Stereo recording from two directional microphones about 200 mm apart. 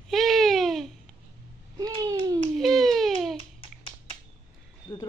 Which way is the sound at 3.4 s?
25° left (ahead or behind).